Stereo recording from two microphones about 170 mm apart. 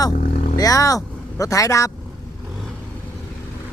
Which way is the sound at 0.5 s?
20° left (ahead or behind).